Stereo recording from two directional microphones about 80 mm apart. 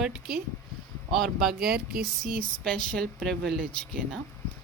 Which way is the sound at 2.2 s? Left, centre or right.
Centre.